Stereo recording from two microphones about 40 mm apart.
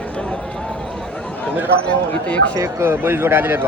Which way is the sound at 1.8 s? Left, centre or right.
Left.